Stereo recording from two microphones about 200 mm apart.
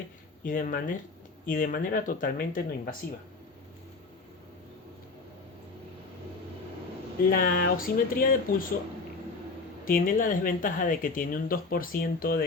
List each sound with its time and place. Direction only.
0.4 s speech: 40° left (ahead or behind)
7.3 s speech: 45° left (ahead or behind)
9.8 s speech: 45° left (ahead or behind)